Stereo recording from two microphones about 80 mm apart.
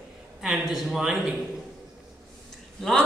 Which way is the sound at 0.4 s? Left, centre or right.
Centre.